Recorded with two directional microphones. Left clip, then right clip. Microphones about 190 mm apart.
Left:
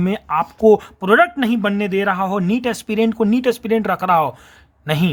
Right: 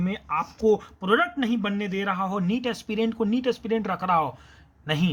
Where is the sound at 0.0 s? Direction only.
45° left (ahead or behind).